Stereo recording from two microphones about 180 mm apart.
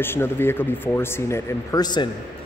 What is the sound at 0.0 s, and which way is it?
A man's voice, 10° left (ahead or behind).